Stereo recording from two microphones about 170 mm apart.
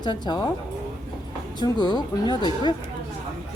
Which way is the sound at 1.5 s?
25° left (ahead or behind).